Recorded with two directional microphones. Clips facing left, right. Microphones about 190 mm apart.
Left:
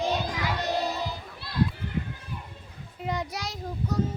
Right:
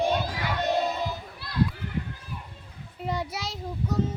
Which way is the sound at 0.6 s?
25° right (ahead or behind).